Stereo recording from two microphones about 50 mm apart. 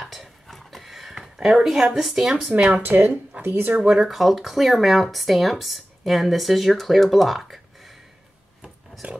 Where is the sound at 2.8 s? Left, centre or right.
Right.